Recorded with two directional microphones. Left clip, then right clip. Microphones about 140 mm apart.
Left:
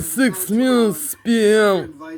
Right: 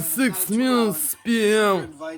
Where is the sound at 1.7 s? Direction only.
20° right (ahead or behind).